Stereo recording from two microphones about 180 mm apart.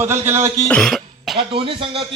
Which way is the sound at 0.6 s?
5° left (ahead or behind).